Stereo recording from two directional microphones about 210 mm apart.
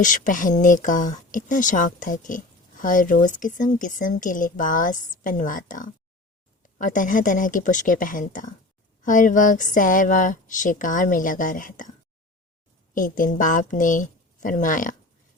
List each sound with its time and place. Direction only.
0.0 s speech: 40° left (ahead or behind)
12.9 s speech: 40° left (ahead or behind)